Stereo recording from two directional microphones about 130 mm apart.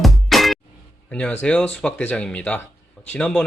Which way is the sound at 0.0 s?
Centre (ahead or behind).